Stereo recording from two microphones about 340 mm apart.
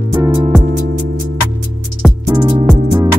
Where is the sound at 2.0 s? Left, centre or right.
Centre.